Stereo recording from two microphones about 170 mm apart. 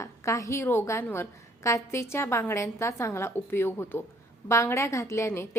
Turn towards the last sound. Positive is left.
turn(degrees=15)  # may be behind; listen again after turning